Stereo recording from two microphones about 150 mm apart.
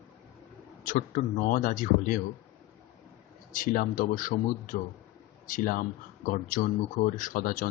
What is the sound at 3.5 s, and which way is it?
A man's voice, 65° left (ahead or behind).